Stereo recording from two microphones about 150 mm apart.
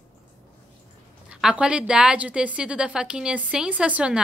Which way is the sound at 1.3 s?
5° right (ahead or behind).